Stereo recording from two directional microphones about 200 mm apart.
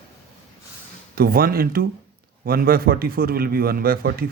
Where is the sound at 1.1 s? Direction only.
50° right (ahead or behind).